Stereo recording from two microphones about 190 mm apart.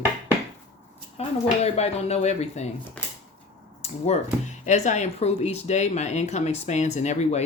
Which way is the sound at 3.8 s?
35° left (ahead or behind).